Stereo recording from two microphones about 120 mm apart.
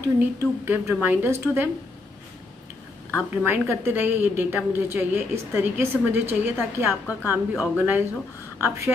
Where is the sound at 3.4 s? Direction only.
20° right (ahead or behind).